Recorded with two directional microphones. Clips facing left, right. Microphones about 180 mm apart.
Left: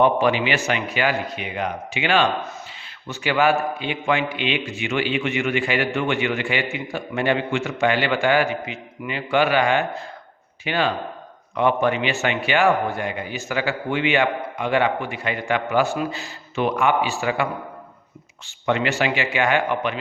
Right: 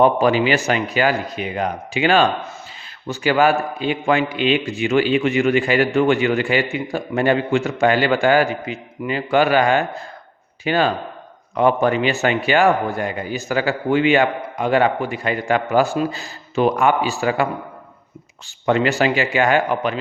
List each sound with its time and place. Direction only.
0.0 s a man's voice: 40° right (ahead or behind)
18.6 s a man's voice: 35° right (ahead or behind)